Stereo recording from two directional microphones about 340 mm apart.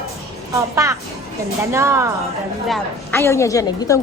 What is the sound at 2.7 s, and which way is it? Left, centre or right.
A woman's voice, centre.